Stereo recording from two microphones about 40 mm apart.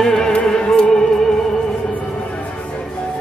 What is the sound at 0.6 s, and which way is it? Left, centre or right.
Speech, left.